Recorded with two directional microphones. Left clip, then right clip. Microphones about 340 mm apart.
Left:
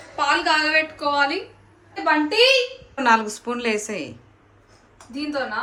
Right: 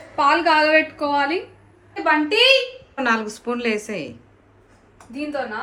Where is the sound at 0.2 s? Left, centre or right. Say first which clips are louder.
Right 3 dB; centre.